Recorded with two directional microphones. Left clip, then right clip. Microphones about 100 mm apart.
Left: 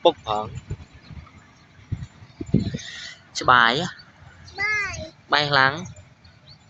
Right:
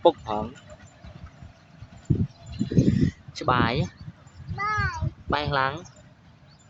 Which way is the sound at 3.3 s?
5° right (ahead or behind).